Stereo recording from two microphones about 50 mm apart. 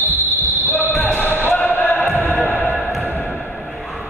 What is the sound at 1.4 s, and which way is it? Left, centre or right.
Basketball bounce, left.